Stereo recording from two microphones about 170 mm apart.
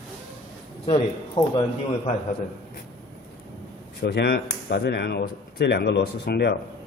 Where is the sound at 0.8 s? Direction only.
35° left (ahead or behind).